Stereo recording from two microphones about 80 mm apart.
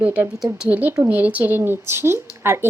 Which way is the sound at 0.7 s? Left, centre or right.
Right.